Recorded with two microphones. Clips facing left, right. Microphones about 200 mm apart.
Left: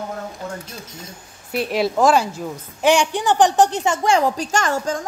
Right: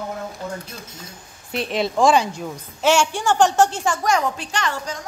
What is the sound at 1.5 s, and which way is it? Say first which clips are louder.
Speech: left 2 dB; 5° left (ahead or behind).